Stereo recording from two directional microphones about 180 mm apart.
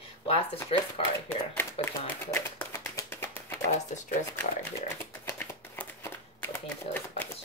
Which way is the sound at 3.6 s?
40° left (ahead or behind).